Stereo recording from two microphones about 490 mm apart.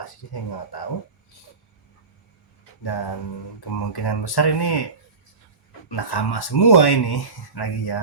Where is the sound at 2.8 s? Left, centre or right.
Left.